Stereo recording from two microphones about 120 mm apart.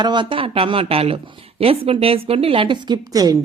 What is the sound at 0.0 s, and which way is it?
Speech, 40° right (ahead or behind).